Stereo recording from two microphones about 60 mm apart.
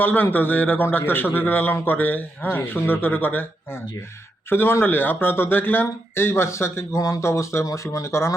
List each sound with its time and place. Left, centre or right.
0.0 s a man's voice: left